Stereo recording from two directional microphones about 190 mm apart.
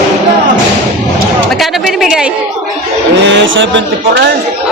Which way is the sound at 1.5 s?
Centre (ahead or behind).